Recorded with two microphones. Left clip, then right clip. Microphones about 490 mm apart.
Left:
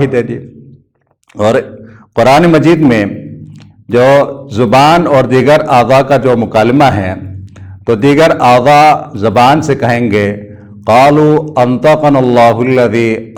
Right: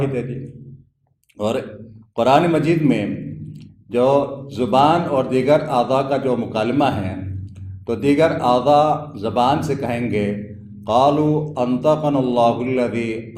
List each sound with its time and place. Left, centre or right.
0.0 s a man's voice: left
1.4 s a man's voice: left
11.5 s a man's voice: left